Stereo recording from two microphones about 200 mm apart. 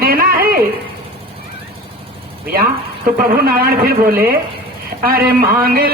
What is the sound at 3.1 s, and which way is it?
Speech, 45° right (ahead or behind).